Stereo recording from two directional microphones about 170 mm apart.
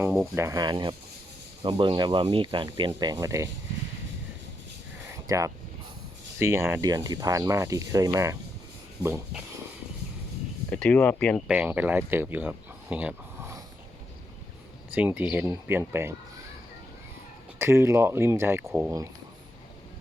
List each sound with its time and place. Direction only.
0.0 s speech: 10° right (ahead or behind)
5.3 s speech: 20° right (ahead or behind)
10.7 s speech: 5° left (ahead or behind)
11.4 s speech: 10° right (ahead or behind)
14.9 s speech: 10° right (ahead or behind)
17.6 s speech: 15° right (ahead or behind)